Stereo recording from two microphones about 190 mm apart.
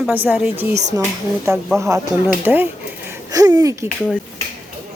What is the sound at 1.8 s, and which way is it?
A woman's voice, 15° right (ahead or behind).